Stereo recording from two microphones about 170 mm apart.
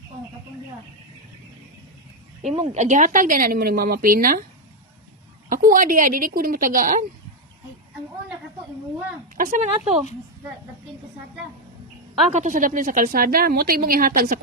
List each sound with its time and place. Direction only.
2.4 s speech: 40° right (ahead or behind); by 4.4 s 55° right (ahead or behind)
5.5 s a woman's voice: 55° right (ahead or behind)
9.4 s a woman's voice: 45° right (ahead or behind)
12.3 s speech: 45° right (ahead or behind)